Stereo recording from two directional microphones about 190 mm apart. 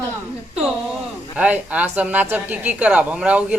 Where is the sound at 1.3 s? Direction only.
5° right (ahead or behind).